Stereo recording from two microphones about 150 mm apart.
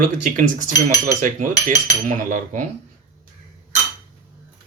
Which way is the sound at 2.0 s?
60° right (ahead or behind).